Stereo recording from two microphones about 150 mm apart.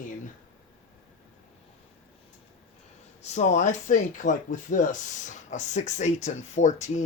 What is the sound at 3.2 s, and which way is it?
Speech, 50° left (ahead or behind).